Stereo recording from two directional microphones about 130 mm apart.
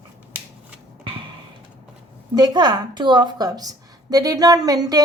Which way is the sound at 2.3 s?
35° right (ahead or behind).